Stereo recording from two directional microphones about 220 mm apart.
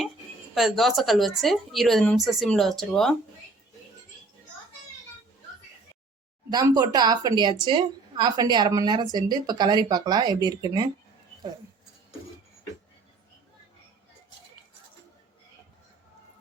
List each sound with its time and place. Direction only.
0.5 s a woman's voice: centre (ahead or behind)
6.5 s a woman's voice: 15° right (ahead or behind)